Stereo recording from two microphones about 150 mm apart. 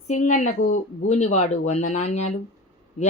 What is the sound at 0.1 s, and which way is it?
Speech, 55° left (ahead or behind).